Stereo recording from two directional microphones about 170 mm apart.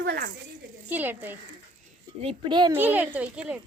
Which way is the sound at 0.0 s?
75° right (ahead or behind).